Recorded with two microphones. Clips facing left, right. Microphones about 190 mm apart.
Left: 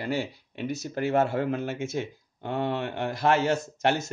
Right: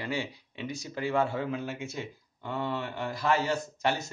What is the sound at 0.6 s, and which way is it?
Speech, 60° left (ahead or behind).